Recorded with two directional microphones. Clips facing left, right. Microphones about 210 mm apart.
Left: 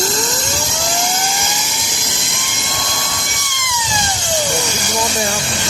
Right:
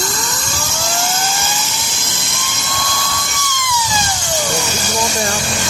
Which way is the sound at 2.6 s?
20° left (ahead or behind).